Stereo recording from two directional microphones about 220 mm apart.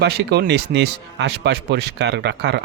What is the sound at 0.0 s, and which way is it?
Speech, 50° right (ahead or behind).